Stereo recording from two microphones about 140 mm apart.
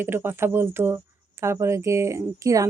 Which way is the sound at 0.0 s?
15° right (ahead or behind).